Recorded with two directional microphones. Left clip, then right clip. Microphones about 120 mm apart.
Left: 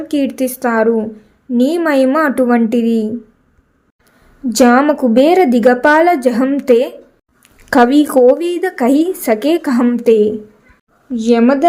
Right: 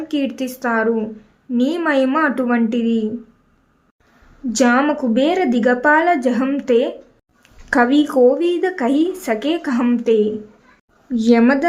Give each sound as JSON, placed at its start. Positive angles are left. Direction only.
{"t": 0.1, "sound": "a woman's voice", "side_deg": 40}
{"t": 4.4, "sound": "speech", "side_deg": 50}
{"t": 11.1, "sound": "a woman's voice", "side_deg": 20}